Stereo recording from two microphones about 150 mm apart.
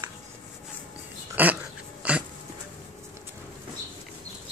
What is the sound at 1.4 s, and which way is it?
Dog, 15° right (ahead or behind).